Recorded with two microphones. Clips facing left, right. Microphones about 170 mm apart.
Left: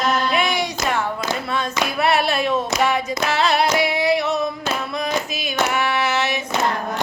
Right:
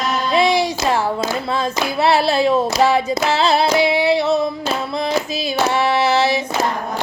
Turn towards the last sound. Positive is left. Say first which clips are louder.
# right 5 dB
turn(degrees=-35)  # may be behind; listen again after turning